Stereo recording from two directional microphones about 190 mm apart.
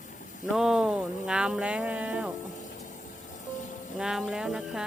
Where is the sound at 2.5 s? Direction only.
40° left (ahead or behind).